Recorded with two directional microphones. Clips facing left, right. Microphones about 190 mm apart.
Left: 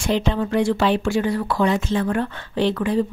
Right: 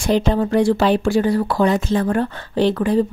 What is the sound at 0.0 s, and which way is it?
Speech, 40° right (ahead or behind).